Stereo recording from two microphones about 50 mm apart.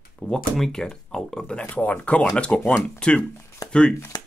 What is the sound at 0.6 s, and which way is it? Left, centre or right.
Speech, centre.